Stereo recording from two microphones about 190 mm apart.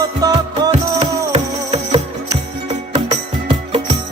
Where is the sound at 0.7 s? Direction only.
35° right (ahead or behind).